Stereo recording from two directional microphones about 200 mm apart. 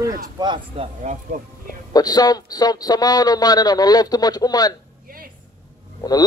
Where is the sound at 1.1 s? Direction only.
35° right (ahead or behind).